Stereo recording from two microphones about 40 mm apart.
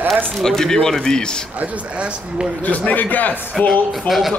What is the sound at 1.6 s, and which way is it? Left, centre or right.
Speech, right.